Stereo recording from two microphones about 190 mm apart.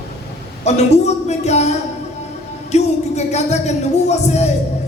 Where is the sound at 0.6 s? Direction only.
35° left (ahead or behind).